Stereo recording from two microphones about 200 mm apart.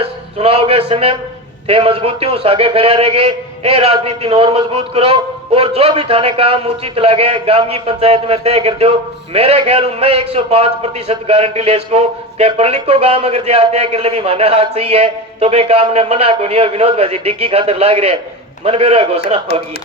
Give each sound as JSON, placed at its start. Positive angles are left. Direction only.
{"t": 0.0, "sound": "a man's voice", "side_deg": -30}